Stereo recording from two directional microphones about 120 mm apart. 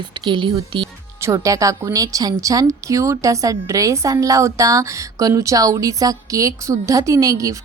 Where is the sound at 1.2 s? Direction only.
25° right (ahead or behind).